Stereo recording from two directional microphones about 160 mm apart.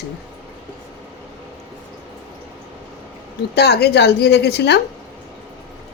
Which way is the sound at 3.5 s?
90° left.